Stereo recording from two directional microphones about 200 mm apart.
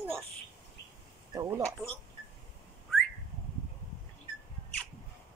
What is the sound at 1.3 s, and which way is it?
Speech, 20° right (ahead or behind).